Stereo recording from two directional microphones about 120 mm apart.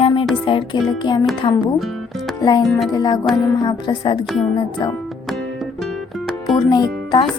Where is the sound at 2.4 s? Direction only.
35° left (ahead or behind).